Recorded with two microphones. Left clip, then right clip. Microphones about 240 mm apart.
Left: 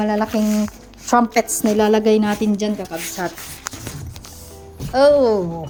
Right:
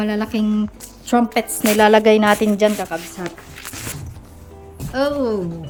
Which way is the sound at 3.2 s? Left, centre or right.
Centre.